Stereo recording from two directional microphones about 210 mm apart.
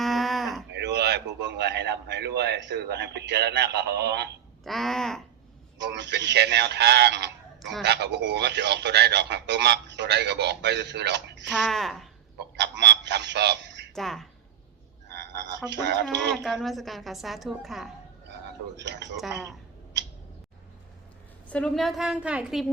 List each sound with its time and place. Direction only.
0.0 s moo: centre (ahead or behind)
0.7 s speech: 55° right (ahead or behind)
4.6 s a woman's voice: centre (ahead or behind)
5.8 s speech: 55° right (ahead or behind)
11.4 s a woman's voice: centre (ahead or behind)
12.5 s a sound: 55° right (ahead or behind)
13.9 s a woman's voice: centre (ahead or behind)
15.7 s speech: 55° right (ahead or behind)
16.3 s a woman's voice: centre (ahead or behind)
18.8 s speech: 55° right (ahead or behind)
21.5 s a woman's voice: 5° left (ahead or behind)